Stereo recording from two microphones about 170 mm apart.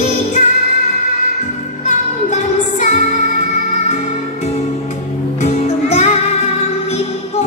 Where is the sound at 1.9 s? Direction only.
45° left (ahead or behind).